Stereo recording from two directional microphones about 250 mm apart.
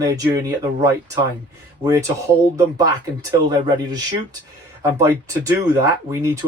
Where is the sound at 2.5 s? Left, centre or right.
Centre.